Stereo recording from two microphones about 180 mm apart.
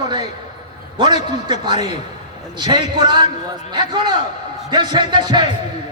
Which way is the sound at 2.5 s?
25° right (ahead or behind).